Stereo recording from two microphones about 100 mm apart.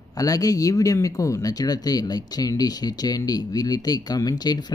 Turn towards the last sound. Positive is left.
turn(degrees=40)  # may be behind; listen again after turning